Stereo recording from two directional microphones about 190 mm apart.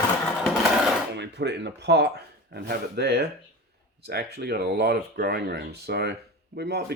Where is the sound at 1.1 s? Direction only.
65° right (ahead or behind).